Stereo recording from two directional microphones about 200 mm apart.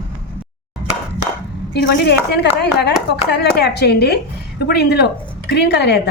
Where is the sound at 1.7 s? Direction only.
60° left (ahead or behind).